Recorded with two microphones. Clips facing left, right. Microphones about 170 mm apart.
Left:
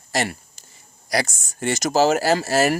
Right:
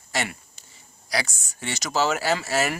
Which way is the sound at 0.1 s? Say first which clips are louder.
Left 5 dB; 40° left (ahead or behind).